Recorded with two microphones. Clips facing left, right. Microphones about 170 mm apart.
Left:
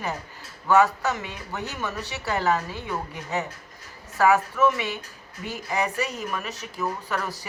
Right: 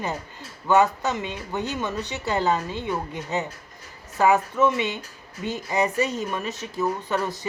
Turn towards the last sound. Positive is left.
turn(degrees=-20)  # may be behind; listen again after turning